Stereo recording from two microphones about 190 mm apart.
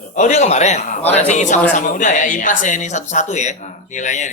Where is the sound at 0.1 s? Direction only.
40° left (ahead or behind).